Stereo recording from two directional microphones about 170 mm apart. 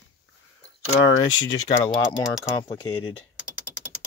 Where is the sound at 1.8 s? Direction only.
30° left (ahead or behind).